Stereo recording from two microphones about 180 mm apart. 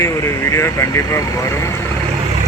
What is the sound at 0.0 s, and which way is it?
Speech, 15° left (ahead or behind).